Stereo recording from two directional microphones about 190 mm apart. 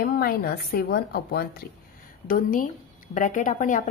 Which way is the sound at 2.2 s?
45° left (ahead or behind).